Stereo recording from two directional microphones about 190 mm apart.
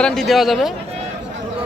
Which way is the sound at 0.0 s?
Centre (ahead or behind).